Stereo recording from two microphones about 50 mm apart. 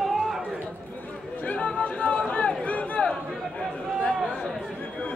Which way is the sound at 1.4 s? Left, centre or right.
Left.